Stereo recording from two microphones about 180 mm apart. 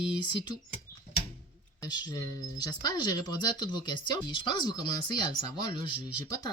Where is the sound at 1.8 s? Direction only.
20° left (ahead or behind).